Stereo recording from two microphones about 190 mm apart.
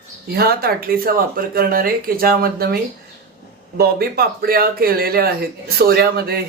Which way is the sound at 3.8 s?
55° right (ahead or behind).